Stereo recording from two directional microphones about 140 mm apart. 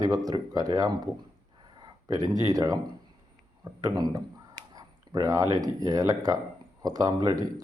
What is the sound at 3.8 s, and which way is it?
Speech, 30° right (ahead or behind).